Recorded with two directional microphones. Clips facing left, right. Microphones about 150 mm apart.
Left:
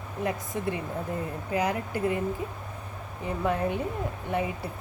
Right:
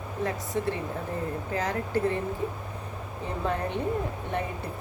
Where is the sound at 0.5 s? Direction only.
15° left (ahead or behind).